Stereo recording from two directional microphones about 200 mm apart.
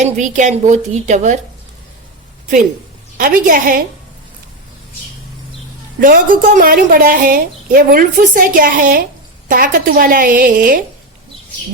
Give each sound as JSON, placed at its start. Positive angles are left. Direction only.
{"t": 0.0, "sound": "a woman's voice", "side_deg": -35}
{"t": 3.2, "sound": "a woman's voice", "side_deg": -45}
{"t": 6.0, "sound": "a woman's voice", "side_deg": -45}